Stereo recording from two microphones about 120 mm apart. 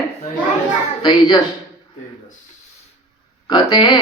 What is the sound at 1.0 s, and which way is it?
Speech, 35° left (ahead or behind).